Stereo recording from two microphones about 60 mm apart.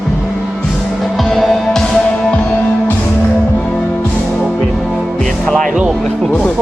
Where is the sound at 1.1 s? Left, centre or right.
Centre.